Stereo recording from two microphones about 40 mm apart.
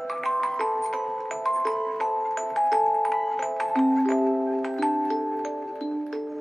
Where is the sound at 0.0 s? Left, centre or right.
Centre.